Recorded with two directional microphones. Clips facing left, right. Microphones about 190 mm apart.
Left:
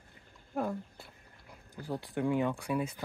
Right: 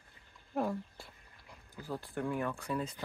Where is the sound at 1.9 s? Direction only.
15° left (ahead or behind).